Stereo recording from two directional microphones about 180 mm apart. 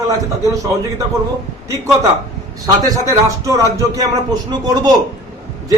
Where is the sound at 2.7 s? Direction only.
20° right (ahead or behind).